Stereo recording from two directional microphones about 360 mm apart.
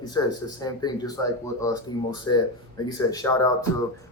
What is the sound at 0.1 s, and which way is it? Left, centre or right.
Speech, centre.